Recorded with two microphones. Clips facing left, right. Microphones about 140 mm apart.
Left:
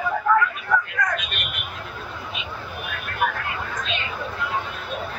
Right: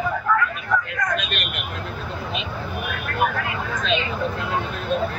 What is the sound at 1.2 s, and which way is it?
Vehicle, 80° right.